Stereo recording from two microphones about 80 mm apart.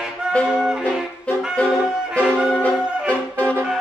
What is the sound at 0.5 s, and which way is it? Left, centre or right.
Music, centre.